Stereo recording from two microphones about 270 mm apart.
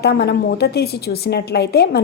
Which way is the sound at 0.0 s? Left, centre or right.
Left.